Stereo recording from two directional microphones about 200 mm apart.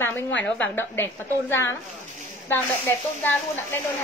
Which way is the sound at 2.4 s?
10° left (ahead or behind).